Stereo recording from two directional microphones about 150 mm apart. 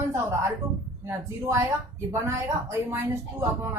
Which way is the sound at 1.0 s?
15° right (ahead or behind).